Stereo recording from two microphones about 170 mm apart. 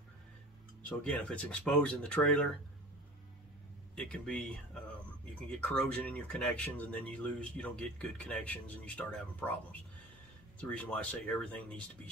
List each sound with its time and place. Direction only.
0.8 s speech: 5° left (ahead or behind)
3.9 s speech: 5° left (ahead or behind)
5.6 s speech: 10° left (ahead or behind)